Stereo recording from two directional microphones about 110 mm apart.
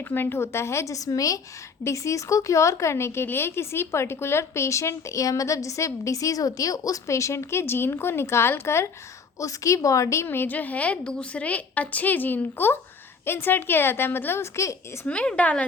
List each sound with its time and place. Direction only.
0.0 s a woman's voice: 20° left (ahead or behind)
15.0 s a woman's voice: 10° left (ahead or behind)